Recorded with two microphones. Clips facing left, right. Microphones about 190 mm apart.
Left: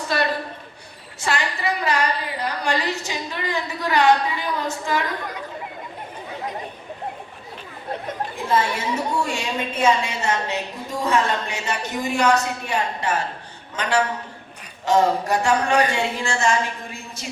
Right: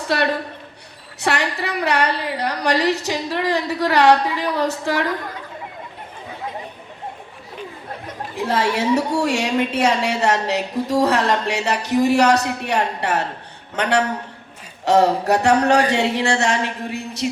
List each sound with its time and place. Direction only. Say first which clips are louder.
0.1 s a woman's voice: right 3 dB; 70° right (ahead or behind)
8.4 s a woman's voice: right 4 dB; 75° right (ahead or behind)